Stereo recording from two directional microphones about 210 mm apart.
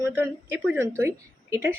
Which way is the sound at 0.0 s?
10° right (ahead or behind).